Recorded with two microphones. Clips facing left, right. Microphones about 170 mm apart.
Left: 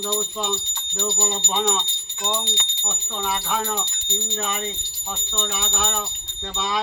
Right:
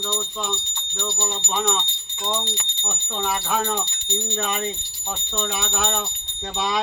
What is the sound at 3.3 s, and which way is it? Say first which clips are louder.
Speech: right 2 dB; 10° right (ahead or behind).